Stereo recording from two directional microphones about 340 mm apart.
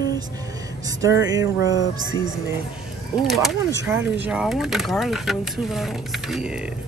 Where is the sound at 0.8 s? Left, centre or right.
Centre.